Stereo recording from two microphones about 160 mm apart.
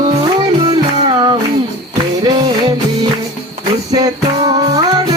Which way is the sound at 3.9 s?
25° right (ahead or behind).